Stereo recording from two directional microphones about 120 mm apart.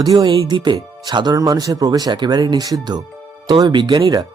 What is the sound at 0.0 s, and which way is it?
Speech, 30° right (ahead or behind).